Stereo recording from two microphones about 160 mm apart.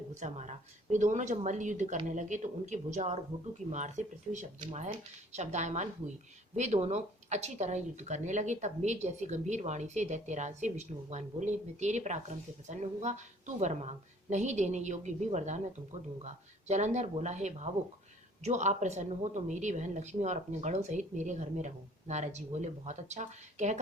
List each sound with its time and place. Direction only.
0.1 s speech: 45° right (ahead or behind)